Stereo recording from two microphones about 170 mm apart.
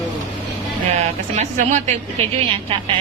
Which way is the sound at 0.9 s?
40° right (ahead or behind).